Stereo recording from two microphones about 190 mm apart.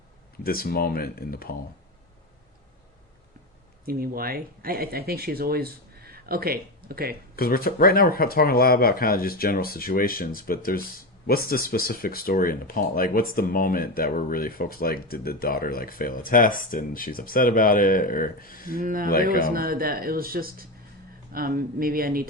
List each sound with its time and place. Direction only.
0.4 s speech: 50° left (ahead or behind)
3.8 s speech: 50° right (ahead or behind)
7.3 s speech: 50° left (ahead or behind)
18.8 s speech: 50° right (ahead or behind)